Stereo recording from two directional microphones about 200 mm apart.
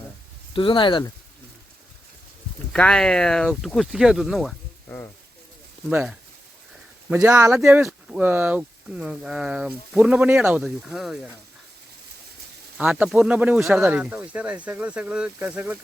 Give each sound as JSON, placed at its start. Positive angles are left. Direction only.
{"t": 0.5, "sound": "speech", "side_deg": 25}
{"t": 2.7, "sound": "speech", "side_deg": 5}
{"t": 4.9, "sound": "a sound", "side_deg": 10}
{"t": 5.9, "sound": "speech", "side_deg": -5}
{"t": 7.1, "sound": "speech", "side_deg": -15}
{"t": 12.7, "sound": "speech", "side_deg": -5}